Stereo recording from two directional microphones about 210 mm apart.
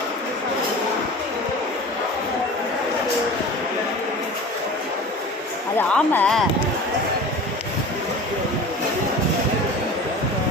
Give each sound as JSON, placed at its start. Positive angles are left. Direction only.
{"t": 5.7, "sound": "speech", "side_deg": 5}